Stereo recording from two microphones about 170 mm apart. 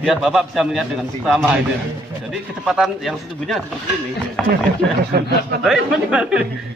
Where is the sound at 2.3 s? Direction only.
5° right (ahead or behind).